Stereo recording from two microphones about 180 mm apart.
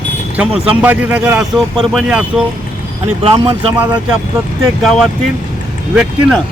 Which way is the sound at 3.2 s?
35° right (ahead or behind).